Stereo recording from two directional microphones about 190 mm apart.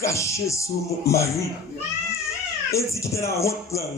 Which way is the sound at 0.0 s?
15° left (ahead or behind).